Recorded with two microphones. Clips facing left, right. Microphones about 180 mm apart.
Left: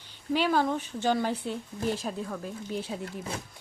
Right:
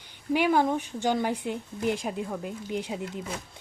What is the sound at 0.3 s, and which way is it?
Speech, 15° right (ahead or behind).